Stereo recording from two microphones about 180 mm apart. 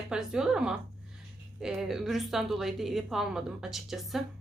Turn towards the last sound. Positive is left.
turn(degrees=0)  # may be behind; listen again after turning